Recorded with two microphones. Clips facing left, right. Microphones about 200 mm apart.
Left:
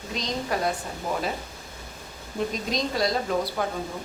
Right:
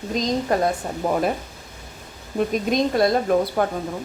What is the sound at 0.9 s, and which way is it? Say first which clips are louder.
Speech: right 7 dB; 55° right (ahead or behind).